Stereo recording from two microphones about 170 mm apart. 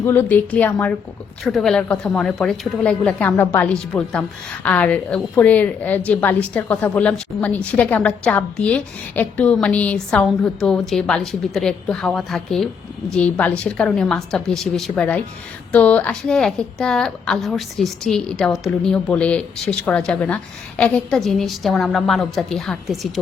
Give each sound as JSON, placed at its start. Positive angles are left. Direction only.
{"t": 0.0, "sound": "a woman's voice", "side_deg": 10}